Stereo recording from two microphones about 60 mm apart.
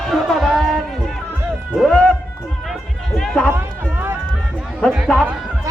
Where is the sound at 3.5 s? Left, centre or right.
Right.